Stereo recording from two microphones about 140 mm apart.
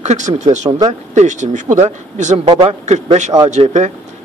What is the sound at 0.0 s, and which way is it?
Speech, 55° right (ahead or behind).